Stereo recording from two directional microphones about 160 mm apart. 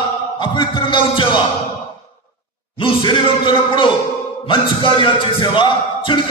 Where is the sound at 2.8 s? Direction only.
30° left (ahead or behind).